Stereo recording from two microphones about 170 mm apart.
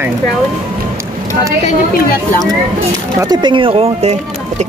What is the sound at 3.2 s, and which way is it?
Speech, 25° right (ahead or behind).